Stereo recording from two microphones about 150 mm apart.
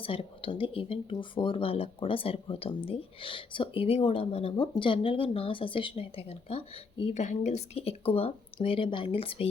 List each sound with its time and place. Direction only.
0.0 s speech: 35° left (ahead or behind)